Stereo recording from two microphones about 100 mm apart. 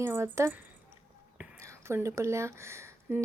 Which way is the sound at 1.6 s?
30° right (ahead or behind).